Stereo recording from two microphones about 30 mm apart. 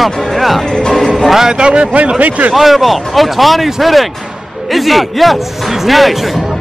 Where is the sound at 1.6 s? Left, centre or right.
Right.